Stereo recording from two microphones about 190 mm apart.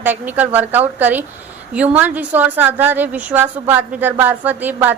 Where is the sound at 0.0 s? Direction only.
10° right (ahead or behind).